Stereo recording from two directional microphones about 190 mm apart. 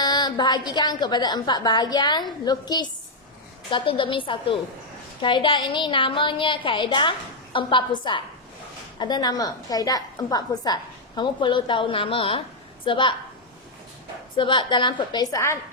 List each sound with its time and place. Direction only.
0.0 s a woman's voice: 20° left (ahead or behind)
14.3 s a woman's voice: 25° left (ahead or behind)